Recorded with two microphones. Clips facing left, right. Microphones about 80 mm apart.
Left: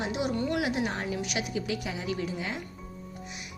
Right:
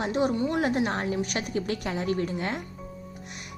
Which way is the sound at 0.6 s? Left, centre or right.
Right.